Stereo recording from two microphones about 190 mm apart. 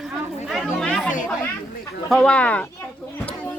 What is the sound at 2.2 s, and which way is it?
Speech, 5° left (ahead or behind).